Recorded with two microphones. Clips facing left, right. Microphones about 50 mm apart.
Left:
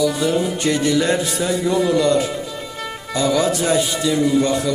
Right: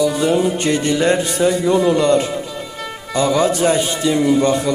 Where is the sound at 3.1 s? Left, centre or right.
Centre.